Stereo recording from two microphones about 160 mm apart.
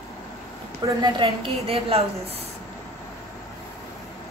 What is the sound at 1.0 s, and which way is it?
A woman's voice, 35° right (ahead or behind).